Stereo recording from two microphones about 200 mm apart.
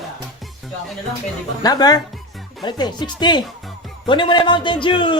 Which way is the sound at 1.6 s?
20° left (ahead or behind).